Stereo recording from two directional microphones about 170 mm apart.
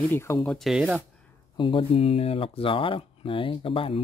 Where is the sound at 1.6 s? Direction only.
30° left (ahead or behind).